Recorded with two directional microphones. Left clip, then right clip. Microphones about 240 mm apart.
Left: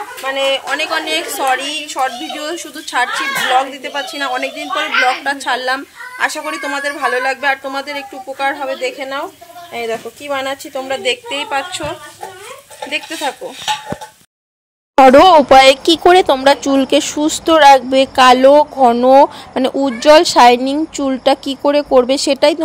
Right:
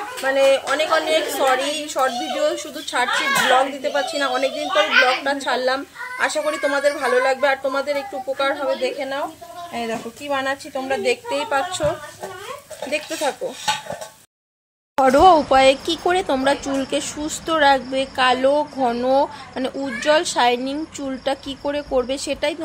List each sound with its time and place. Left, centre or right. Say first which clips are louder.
0.3 s speech: even; centre
8.5 s speech: left 2 dB; left
11.1 s speech: left 3 dB; centre
15.0 s speech: left 7 dB; left